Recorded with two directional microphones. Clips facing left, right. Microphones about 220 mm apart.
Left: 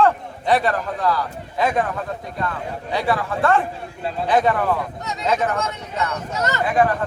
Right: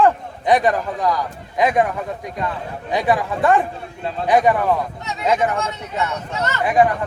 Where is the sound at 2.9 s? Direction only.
15° right (ahead or behind).